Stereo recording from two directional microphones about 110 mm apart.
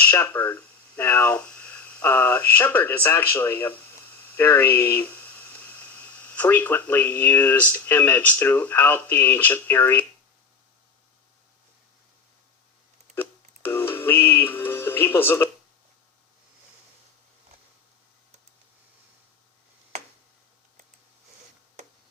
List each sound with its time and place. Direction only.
0.0 s speech: 15° left (ahead or behind)
13.1 s music: 20° left (ahead or behind)